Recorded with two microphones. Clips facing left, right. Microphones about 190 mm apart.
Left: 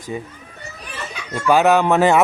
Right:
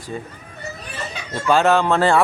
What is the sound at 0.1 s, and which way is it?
Speech, 10° left (ahead or behind).